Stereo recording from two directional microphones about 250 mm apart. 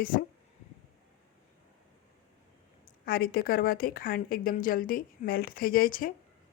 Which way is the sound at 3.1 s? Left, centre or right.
Left.